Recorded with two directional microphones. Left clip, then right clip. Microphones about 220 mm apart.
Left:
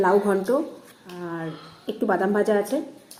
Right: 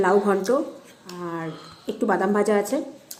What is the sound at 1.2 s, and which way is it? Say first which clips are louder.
A woman's voice: right 1 dB; 25° right (ahead or behind).